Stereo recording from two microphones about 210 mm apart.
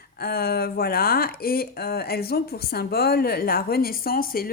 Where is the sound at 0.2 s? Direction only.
45° left (ahead or behind).